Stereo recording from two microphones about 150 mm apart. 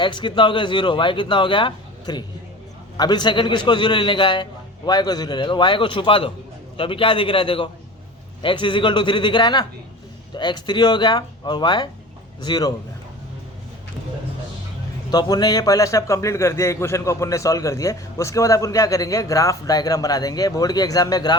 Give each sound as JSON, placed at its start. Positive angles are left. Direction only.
{"t": 0.0, "sound": "a man's voice", "side_deg": 30}
{"t": 15.1, "sound": "a man's voice", "side_deg": 25}